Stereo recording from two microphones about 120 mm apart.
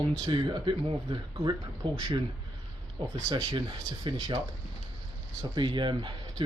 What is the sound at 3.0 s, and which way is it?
Speech, 45° right (ahead or behind).